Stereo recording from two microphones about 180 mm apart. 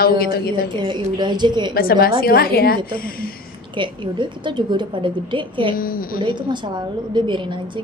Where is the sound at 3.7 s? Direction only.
25° right (ahead or behind).